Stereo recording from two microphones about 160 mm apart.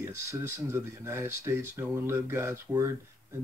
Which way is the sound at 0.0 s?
15° right (ahead or behind).